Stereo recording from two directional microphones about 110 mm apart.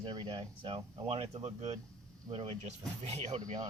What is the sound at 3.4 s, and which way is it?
Speech, 35° right (ahead or behind).